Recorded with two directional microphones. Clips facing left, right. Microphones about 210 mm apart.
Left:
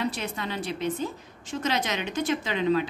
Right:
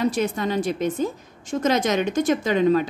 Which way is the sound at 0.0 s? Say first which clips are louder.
Right 8 dB; 45° right (ahead or behind).